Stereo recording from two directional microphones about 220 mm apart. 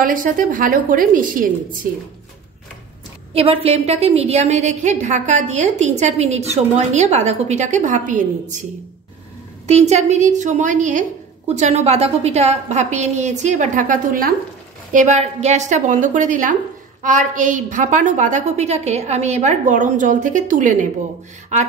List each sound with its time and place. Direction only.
0.0 s a woman's voice: 40° right (ahead or behind)
3.3 s a woman's voice: 25° right (ahead or behind)
9.7 s a woman's voice: 30° right (ahead or behind)